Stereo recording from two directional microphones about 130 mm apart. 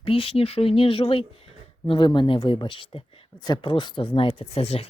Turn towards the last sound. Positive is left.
turn(degrees=50)  # may be behind; listen again after turning